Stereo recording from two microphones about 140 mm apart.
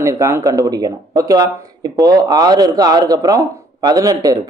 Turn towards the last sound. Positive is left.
turn(degrees=-25)  # may be behind; listen again after turning